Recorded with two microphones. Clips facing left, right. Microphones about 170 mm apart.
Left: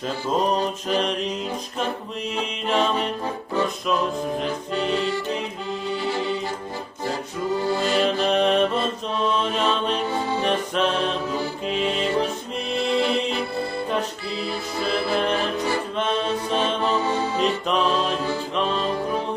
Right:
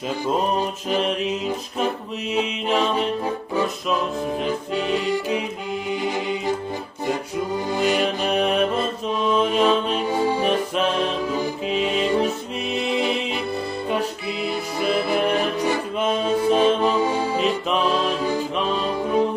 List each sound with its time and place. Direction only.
0.9 s mantra: 5° right (ahead or behind)
2.3 s music: 10° right (ahead or behind)
4.4 s music: 10° right (ahead or behind)
7.7 s music: 15° right (ahead or behind)
14.5 s music: 15° right (ahead or behind)